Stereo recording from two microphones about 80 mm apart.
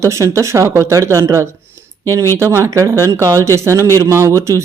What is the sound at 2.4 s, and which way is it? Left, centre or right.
Speech, right.